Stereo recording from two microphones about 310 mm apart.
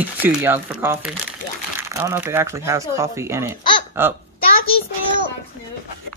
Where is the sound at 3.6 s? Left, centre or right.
Centre.